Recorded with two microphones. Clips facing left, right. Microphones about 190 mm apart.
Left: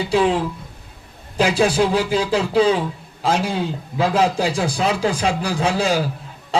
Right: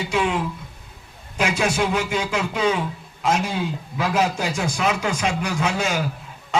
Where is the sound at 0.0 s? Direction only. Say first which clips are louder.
Left 5 dB; 35° left (ahead or behind).